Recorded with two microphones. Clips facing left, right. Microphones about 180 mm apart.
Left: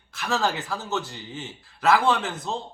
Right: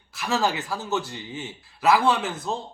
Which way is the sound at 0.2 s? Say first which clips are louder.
Right 1 dB; 5° right (ahead or behind).